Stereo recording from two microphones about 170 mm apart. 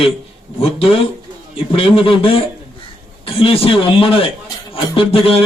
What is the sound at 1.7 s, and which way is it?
A man's voice, 30° left (ahead or behind).